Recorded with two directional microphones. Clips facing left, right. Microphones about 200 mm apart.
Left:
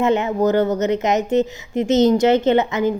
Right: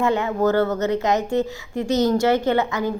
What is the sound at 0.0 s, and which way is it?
A woman's voice, 20° left (ahead or behind).